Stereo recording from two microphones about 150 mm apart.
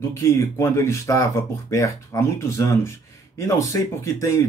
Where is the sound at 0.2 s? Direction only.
20° left (ahead or behind).